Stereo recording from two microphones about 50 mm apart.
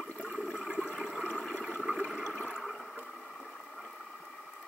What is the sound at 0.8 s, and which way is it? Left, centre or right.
Toilet flush, left.